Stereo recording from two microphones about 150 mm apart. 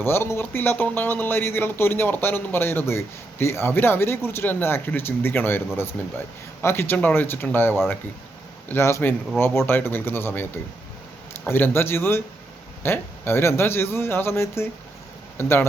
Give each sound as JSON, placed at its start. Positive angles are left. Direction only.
{"t": 0.0, "sound": "speech", "side_deg": 15}